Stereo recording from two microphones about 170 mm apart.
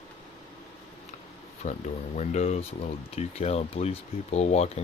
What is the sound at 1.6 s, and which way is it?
Speech, 40° left (ahead or behind).